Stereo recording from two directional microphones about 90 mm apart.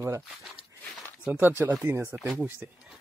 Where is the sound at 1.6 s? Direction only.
25° right (ahead or behind).